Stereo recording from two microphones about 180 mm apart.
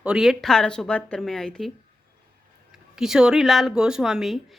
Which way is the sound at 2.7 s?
5° right (ahead or behind).